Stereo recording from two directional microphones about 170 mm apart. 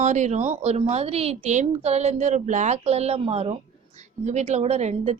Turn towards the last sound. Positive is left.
turn(degrees=-40)  # may be behind; listen again after turning